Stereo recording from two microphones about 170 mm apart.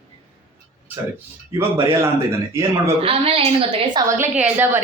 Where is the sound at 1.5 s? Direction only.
15° right (ahead or behind).